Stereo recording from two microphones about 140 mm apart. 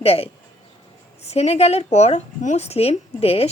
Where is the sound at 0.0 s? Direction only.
45° left (ahead or behind).